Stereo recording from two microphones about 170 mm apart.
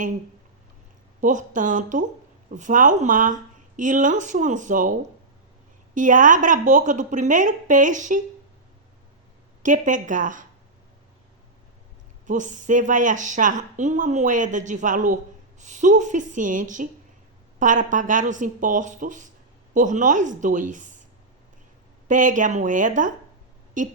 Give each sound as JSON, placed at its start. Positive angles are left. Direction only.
{"t": 1.2, "sound": "a woman's voice", "side_deg": -50}
{"t": 9.6, "sound": "a woman's voice", "side_deg": -50}
{"t": 12.2, "sound": "a woman's voice", "side_deg": -45}
{"t": 22.0, "sound": "a woman's voice", "side_deg": -50}